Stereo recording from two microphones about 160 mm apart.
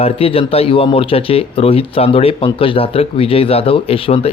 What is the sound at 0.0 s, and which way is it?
Speech, 35° left (ahead or behind).